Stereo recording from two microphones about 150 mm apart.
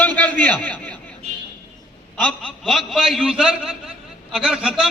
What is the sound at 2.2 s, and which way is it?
A man's voice, 10° left (ahead or behind).